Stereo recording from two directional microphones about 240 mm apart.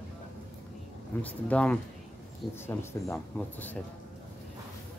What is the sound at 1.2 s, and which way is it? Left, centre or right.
Speech, centre.